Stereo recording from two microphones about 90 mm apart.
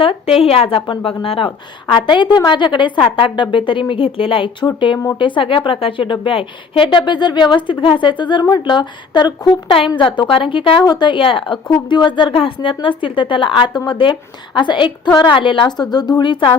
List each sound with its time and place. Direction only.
0.0 s a woman's voice: 90° left
4.6 s a woman's voice: 65° left (ahead or behind)
9.9 s a woman's voice: 65° left (ahead or behind)